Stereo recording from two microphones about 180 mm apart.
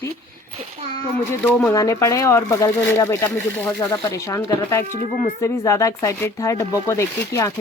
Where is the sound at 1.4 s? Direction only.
15° left (ahead or behind).